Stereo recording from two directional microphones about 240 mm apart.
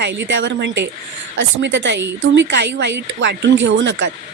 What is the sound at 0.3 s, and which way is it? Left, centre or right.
A woman's voice, right.